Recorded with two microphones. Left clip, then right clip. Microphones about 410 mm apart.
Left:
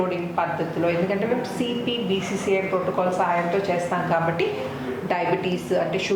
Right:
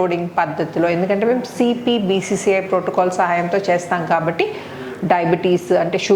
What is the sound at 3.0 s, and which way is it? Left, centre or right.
A woman's voice, right.